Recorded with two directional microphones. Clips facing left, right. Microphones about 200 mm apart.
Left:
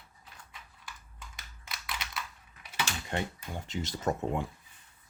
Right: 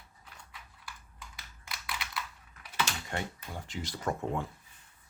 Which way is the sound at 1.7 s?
25° left (ahead or behind).